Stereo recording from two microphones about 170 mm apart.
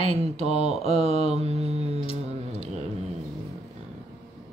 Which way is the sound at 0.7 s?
35° right (ahead or behind).